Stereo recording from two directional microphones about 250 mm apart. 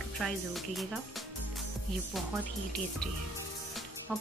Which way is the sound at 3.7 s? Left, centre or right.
Centre.